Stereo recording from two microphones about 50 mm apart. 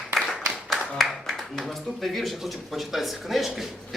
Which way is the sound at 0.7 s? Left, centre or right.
Centre.